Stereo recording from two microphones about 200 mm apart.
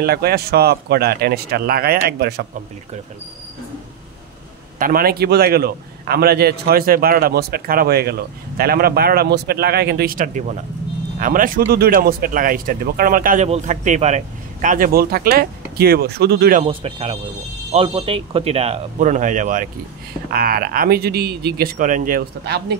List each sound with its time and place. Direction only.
0.0 s a man's voice: 50° right (ahead or behind)
4.7 s a man's voice: 45° right (ahead or behind)
16.6 s a man's voice: 30° right (ahead or behind); by 22.8 s 50° right (ahead or behind)